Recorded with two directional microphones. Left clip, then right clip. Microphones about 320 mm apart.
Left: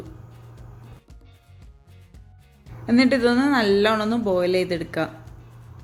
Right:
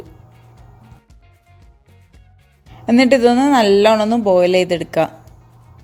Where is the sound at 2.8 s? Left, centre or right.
Right.